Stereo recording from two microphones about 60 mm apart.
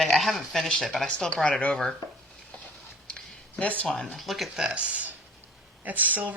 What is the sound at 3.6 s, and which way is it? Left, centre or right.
Speech, left.